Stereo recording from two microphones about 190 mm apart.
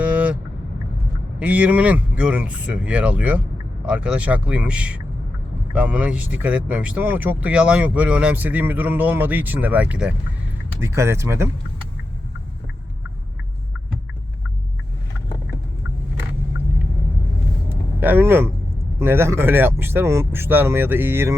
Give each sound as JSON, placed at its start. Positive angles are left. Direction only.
{"t": 0.0, "sound": "vehicle", "side_deg": -5}
{"t": 1.4, "sound": "speech", "side_deg": -5}
{"t": 17.7, "sound": "vehicle", "side_deg": -10}
{"t": 18.9, "sound": "speech", "side_deg": -10}